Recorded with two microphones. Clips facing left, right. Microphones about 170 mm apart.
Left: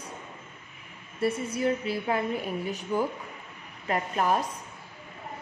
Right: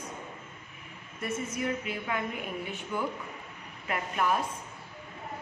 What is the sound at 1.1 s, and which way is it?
A woman's voice, 30° left (ahead or behind).